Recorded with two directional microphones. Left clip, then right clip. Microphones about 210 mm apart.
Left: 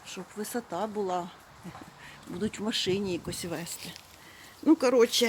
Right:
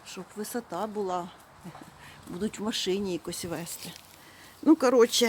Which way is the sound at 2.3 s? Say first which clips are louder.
Even; centre (ahead or behind).